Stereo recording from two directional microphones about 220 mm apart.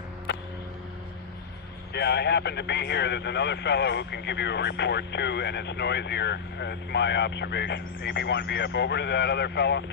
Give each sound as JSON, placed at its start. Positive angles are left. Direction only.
{"t": 2.0, "sound": "speech", "side_deg": 50}